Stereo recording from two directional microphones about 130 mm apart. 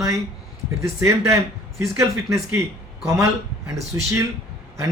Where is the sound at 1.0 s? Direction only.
20° right (ahead or behind).